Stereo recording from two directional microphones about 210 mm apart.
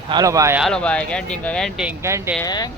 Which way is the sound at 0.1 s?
15° right (ahead or behind).